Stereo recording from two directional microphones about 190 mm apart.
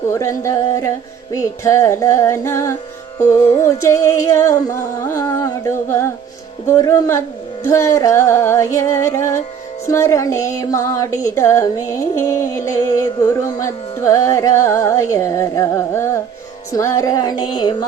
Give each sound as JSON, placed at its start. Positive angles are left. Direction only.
{"t": 0.1, "sound": "music", "side_deg": 15}